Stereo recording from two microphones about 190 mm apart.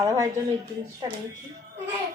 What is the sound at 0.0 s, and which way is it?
A woman's voice, 15° right (ahead or behind).